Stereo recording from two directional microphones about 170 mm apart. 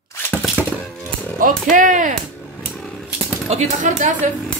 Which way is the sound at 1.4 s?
55° right (ahead or behind).